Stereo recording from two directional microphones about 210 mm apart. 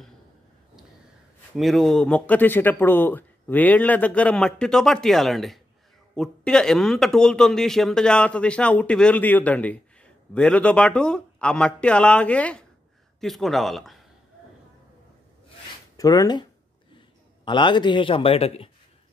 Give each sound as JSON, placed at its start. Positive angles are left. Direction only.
{"t": 1.6, "sound": "speech", "side_deg": 0}
{"t": 16.0, "sound": "speech", "side_deg": 15}
{"t": 17.5, "sound": "a man's voice", "side_deg": 20}